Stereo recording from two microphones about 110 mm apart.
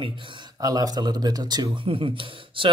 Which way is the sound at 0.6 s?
35° right (ahead or behind).